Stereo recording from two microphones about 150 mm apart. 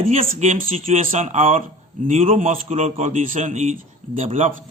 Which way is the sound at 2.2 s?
40° right (ahead or behind).